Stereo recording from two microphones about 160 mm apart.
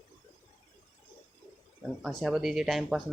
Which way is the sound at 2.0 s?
Centre (ahead or behind).